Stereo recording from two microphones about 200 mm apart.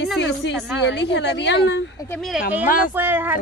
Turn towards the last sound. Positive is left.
turn(degrees=-10)  # may be behind; listen again after turning